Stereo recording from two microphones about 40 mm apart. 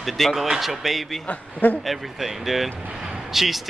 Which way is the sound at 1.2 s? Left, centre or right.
Left.